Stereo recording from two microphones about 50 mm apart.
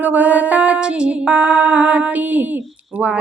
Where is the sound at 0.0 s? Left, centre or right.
Right.